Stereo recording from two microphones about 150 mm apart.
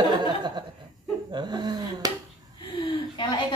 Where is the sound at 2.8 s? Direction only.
30° left (ahead or behind).